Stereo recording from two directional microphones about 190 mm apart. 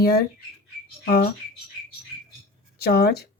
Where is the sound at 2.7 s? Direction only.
55° left (ahead or behind).